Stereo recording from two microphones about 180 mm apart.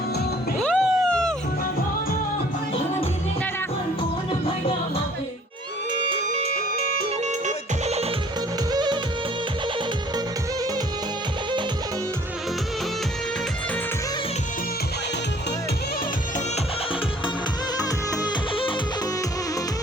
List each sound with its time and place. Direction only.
0.6 s cat: 5° left (ahead or behind)
6.2 s music: 35° right (ahead or behind)
8.7 s music: 25° right (ahead or behind)
17.7 s music: 25° left (ahead or behind)